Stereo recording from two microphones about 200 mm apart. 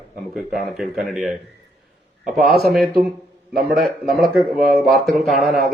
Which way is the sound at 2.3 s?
Centre (ahead or behind).